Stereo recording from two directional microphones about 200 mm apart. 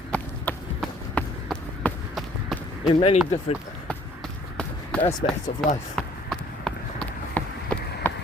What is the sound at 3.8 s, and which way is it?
Run, 5° left (ahead or behind).